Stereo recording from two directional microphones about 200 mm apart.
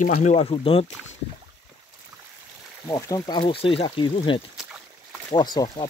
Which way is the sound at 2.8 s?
15° left (ahead or behind).